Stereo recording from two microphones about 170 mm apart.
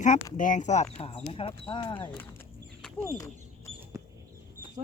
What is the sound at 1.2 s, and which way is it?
Speech, 35° left (ahead or behind).